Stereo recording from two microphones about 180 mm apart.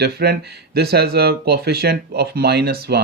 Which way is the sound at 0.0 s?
65° right (ahead or behind).